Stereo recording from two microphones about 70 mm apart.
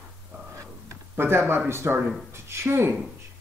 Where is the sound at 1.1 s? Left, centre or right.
Right.